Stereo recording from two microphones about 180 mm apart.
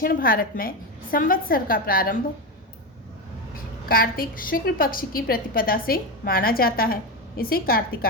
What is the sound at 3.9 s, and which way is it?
A woman's voice, 55° left (ahead or behind).